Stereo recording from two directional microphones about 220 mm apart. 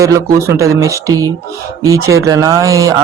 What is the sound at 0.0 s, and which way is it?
Speech, 15° right (ahead or behind).